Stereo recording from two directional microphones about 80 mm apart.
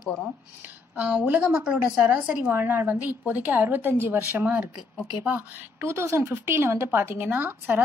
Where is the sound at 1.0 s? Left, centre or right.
Centre.